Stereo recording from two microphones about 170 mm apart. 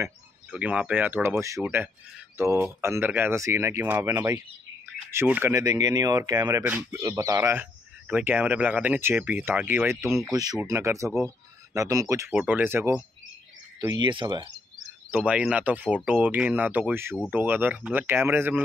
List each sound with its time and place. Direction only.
0.0 s speech: 10° right (ahead or behind)
12.3 s speech: 10° right (ahead or behind)
13.7 s speech: 25° right (ahead or behind)
15.0 s speech: 10° right (ahead or behind)